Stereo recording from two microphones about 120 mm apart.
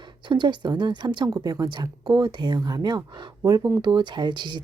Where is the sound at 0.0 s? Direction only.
40° right (ahead or behind).